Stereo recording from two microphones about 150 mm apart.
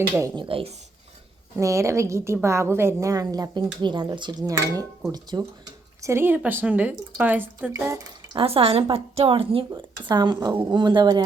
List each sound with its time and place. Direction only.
0.3 s a woman's voice: 35° right (ahead or behind)
1.5 s a woman's voice: 20° right (ahead or behind)
8.4 s a woman's voice: 40° right (ahead or behind)